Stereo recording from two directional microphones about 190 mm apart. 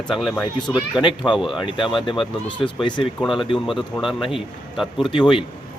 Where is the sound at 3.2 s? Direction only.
Centre (ahead or behind).